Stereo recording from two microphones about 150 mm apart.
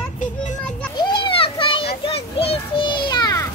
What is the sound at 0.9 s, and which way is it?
Children playing, 30° left (ahead or behind).